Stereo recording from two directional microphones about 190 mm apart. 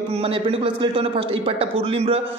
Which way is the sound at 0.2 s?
30° right (ahead or behind).